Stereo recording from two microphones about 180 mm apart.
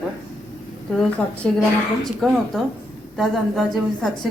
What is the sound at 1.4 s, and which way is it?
A woman's voice, 5° left (ahead or behind).